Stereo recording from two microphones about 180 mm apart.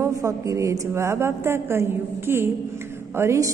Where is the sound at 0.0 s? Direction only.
15° right (ahead or behind).